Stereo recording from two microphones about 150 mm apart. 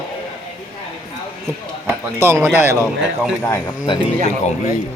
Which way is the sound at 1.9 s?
15° right (ahead or behind).